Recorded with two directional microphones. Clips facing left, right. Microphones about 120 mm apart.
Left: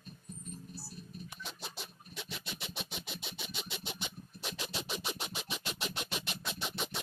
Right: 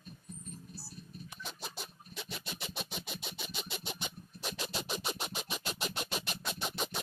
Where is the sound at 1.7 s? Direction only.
40° right (ahead or behind).